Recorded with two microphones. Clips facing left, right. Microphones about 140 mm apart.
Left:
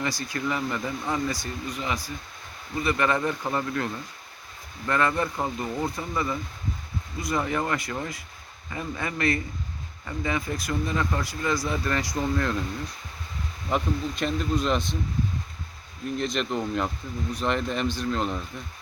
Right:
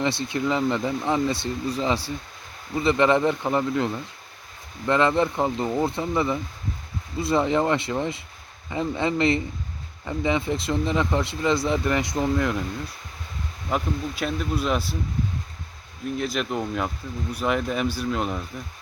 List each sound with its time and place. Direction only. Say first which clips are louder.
0.0 s speech: right 5 dB; 25° right (ahead or behind)
13.7 s speech: even; 5° right (ahead or behind)
16.0 s speech: right 1 dB; 5° right (ahead or behind)